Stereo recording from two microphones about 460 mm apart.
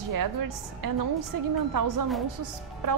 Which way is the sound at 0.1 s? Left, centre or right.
Right.